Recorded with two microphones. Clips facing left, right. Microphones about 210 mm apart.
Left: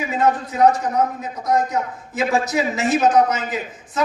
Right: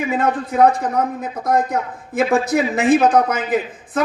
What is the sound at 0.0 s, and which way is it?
A man's voice, 55° right (ahead or behind).